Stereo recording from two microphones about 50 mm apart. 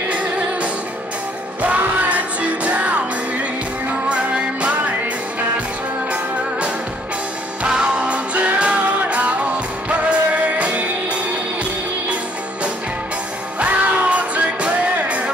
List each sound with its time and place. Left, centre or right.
0.1 s music: right
4.1 s music: right
7.6 s music: right
13.6 s music: right